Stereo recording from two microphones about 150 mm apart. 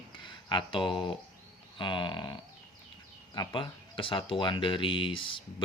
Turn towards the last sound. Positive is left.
turn(degrees=35)  # may be behind; listen again after turning